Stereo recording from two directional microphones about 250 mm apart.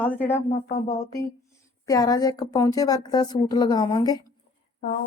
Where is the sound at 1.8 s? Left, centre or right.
Centre.